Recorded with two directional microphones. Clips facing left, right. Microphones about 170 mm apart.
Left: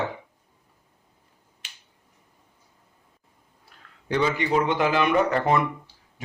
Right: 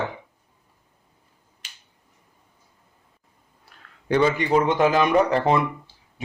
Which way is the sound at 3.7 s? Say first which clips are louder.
Right 2 dB; 65° right (ahead or behind).